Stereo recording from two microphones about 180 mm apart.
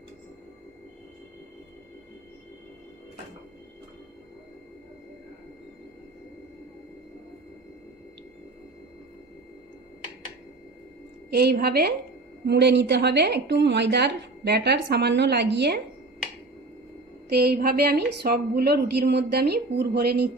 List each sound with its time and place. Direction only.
11.2 s a woman's voice: 60° right (ahead or behind)
12.4 s a woman's voice: 70° right (ahead or behind)
17.3 s a woman's voice: 65° right (ahead or behind)